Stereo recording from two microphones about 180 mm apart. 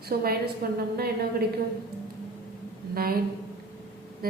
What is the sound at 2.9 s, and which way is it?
Speech, 55° right (ahead or behind).